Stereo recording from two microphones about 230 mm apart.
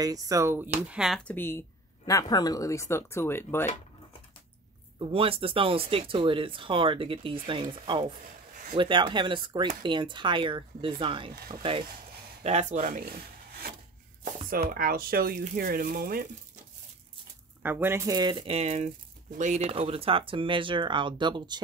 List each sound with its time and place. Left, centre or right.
0.0 s a woman's voice: centre
4.9 s speech: right
11.3 s speech: right
12.4 s speech: right
17.6 s speech: centre